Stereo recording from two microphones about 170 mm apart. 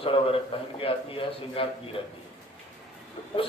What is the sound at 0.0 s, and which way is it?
A man's voice, 30° left (ahead or behind).